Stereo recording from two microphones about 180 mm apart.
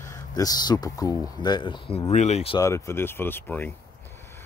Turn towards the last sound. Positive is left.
turn(degrees=10)  # may be behind; listen again after turning